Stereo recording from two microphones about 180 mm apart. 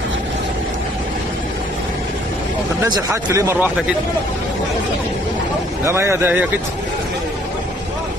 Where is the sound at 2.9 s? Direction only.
20° right (ahead or behind).